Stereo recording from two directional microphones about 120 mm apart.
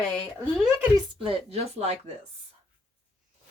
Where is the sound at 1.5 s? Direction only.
60° right (ahead or behind).